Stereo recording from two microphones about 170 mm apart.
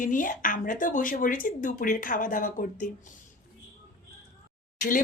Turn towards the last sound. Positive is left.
turn(degrees=50)  # may be behind; listen again after turning